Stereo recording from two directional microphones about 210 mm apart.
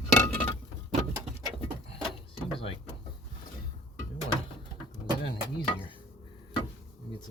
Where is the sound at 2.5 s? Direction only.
25° left (ahead or behind).